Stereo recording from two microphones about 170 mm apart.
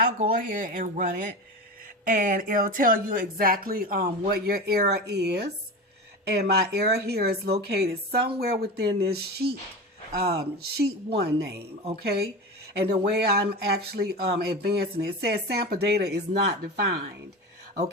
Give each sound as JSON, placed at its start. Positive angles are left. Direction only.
{"t": 0.0, "sound": "speech", "side_deg": -55}
{"t": 13.3, "sound": "speech", "side_deg": -70}